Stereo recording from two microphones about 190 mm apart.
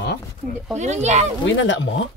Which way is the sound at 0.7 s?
35° right (ahead or behind).